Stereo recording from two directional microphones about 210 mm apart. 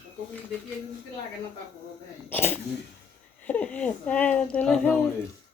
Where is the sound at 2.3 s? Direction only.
10° left (ahead or behind).